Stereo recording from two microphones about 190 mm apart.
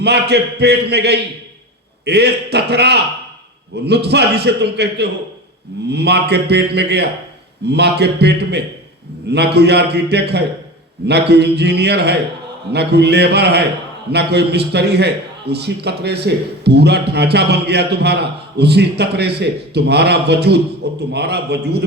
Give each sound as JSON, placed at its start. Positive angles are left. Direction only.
{"t": 0.0, "sound": "a man's voice", "side_deg": -60}